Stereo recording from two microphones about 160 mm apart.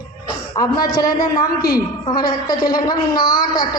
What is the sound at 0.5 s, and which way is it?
Speech, 25° left (ahead or behind).